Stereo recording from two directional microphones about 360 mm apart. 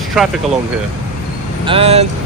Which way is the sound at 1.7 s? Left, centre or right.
Centre.